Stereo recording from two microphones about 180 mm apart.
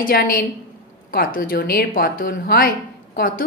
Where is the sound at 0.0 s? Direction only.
55° left (ahead or behind).